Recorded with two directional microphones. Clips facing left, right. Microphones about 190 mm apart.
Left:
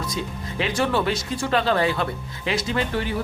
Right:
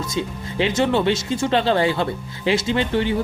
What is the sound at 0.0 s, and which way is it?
Speech, 25° right (ahead or behind).